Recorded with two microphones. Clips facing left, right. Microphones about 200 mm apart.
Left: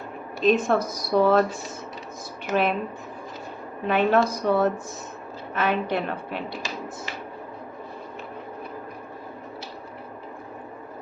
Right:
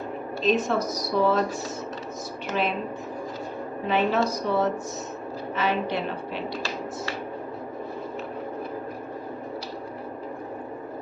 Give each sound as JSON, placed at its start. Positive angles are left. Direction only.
{"t": 0.4, "sound": "speech", "side_deg": 55}
{"t": 2.5, "sound": "speech", "side_deg": 55}
{"t": 3.8, "sound": "speech", "side_deg": 55}